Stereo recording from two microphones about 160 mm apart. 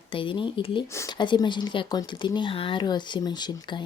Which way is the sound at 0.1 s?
30° left (ahead or behind).